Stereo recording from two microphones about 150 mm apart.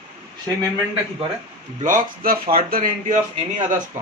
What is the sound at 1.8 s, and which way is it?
Speech, 65° right (ahead or behind).